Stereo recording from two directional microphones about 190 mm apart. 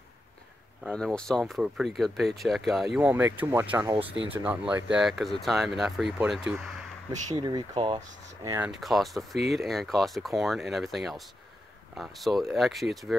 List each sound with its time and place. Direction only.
0.8 s speech: 5° left (ahead or behind)
7.3 s speech: 25° right (ahead or behind)
8.5 s speech: 10° right (ahead or behind)